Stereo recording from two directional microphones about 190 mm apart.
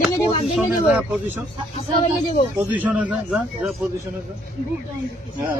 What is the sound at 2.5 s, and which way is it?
A man's voice, 10° right (ahead or behind).